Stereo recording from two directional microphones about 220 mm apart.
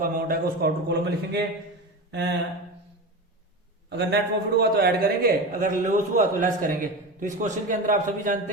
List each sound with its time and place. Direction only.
0.0 s speech: 45° right (ahead or behind)
3.8 s a man's voice: 50° right (ahead or behind)